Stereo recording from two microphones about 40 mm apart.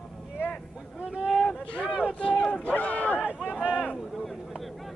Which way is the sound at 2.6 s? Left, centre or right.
Left.